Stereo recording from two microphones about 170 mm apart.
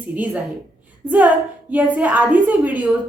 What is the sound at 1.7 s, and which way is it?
A woman's voice, 10° right (ahead or behind).